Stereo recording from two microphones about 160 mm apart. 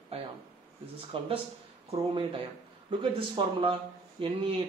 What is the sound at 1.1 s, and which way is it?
Speech, 35° right (ahead or behind).